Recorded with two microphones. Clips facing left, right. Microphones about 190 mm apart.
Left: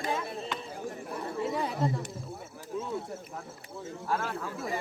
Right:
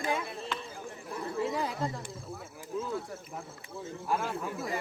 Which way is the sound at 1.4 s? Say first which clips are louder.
Left 2 dB; centre (ahead or behind).